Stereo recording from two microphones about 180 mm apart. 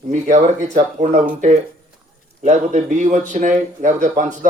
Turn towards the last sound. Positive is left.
turn(degrees=-45)  # may be behind; listen again after turning